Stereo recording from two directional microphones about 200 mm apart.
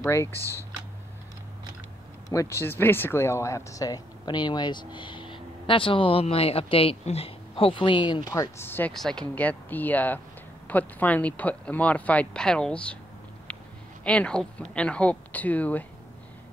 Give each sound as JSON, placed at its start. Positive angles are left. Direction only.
{"t": 0.0, "sound": "speech", "side_deg": 10}
{"t": 0.4, "sound": "speech", "side_deg": -15}
{"t": 2.2, "sound": "speech", "side_deg": 15}
{"t": 8.3, "sound": "speech", "side_deg": 15}
{"t": 13.5, "sound": "a sound", "side_deg": 5}
{"t": 14.0, "sound": "speech", "side_deg": 5}